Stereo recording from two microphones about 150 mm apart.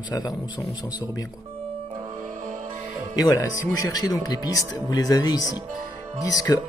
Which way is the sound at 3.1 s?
25° left (ahead or behind).